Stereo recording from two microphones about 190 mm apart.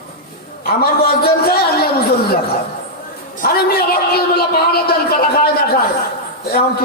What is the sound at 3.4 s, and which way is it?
A man's voice, 55° left (ahead or behind).